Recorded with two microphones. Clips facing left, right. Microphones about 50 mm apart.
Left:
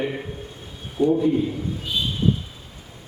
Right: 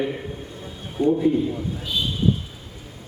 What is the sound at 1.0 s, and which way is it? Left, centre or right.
Speech, centre.